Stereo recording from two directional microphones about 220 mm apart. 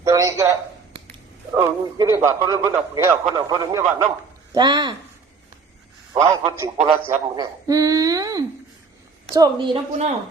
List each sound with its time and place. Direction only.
0.0 s a sound: 15° right (ahead or behind)
1.5 s a woman's voice: 20° right (ahead or behind)
6.2 s a woman's voice: 15° right (ahead or behind)